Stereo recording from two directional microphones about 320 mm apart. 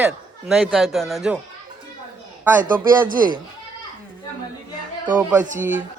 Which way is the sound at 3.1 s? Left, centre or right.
Right.